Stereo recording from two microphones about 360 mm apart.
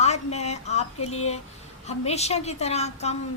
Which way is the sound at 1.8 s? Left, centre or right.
Centre.